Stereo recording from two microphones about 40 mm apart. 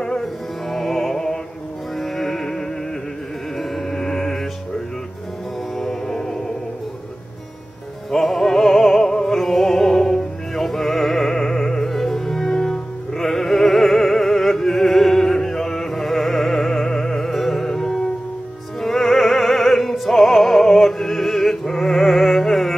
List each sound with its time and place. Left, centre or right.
0.2 s music: centre
5.8 s music: centre
6.1 s music: centre
8.1 s music: centre
13.2 s opera: centre